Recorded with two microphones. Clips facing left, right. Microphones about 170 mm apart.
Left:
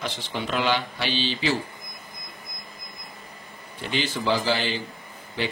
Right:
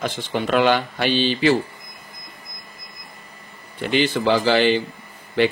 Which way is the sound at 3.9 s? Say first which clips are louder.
Right 7 dB; 60° right (ahead or behind).